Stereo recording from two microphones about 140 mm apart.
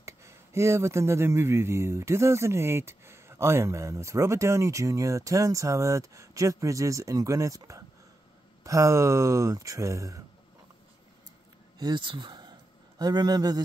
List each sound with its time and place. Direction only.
0.0 s speech: 20° right (ahead or behind)
11.8 s speech: 35° right (ahead or behind)